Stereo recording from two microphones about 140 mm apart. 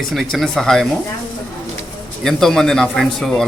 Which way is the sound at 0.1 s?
Centre (ahead or behind).